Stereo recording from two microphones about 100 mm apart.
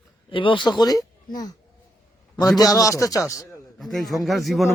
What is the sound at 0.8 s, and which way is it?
Speech, 40° left (ahead or behind).